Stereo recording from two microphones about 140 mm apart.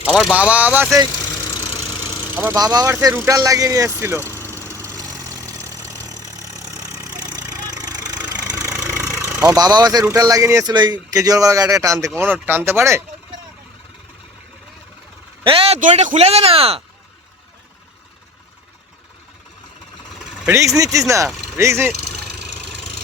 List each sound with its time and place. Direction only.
0.1 s speech: centre (ahead or behind)
0.3 s speech: 10° right (ahead or behind)
2.3 s vehicle: 15° right (ahead or behind)
9.4 s speech: 25° right (ahead or behind)
15.4 s speech: 45° right (ahead or behind)
15.8 s speech: 60° right (ahead or behind); by 16.8 s 45° right (ahead or behind)
20.7 s speech: 25° right (ahead or behind)